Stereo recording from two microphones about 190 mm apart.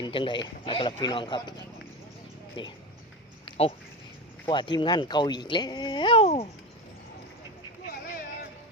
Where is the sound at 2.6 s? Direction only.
25° left (ahead or behind).